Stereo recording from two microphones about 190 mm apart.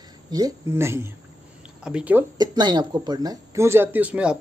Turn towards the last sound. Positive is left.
turn(degrees=-5)  # may be behind; listen again after turning